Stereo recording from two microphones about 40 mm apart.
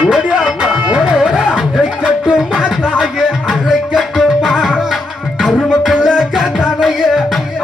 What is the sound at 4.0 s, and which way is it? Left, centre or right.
Music, centre.